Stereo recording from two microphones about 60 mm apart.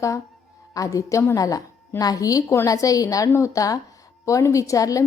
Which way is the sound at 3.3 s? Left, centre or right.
Left.